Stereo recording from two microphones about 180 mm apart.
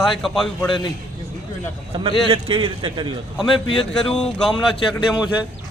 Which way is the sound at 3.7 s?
30° left (ahead or behind).